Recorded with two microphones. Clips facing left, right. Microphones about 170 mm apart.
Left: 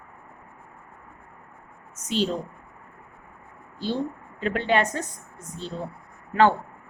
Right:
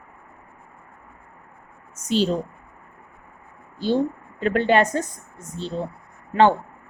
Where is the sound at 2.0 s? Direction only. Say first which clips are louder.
Right 4 dB; 35° right (ahead or behind).